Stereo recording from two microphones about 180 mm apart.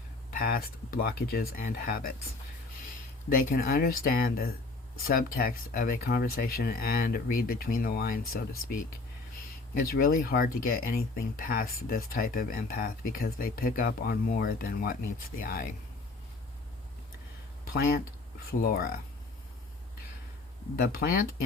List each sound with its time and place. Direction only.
0.3 s speech: 55° left (ahead or behind)
3.2 s speech: 50° left (ahead or behind)
18.6 s speech: 55° left (ahead or behind)
20.7 s speech: 55° left (ahead or behind)